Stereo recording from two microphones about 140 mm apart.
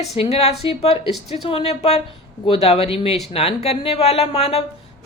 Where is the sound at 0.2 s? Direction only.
50° left (ahead or behind).